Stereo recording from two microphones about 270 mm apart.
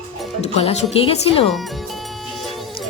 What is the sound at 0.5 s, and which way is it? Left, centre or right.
Speech, left.